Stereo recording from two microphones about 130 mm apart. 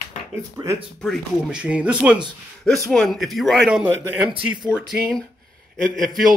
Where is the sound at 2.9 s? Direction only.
Centre (ahead or behind).